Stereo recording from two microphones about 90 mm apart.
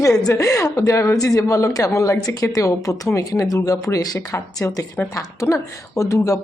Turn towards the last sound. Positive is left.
turn(degrees=40)  # may be behind; listen again after turning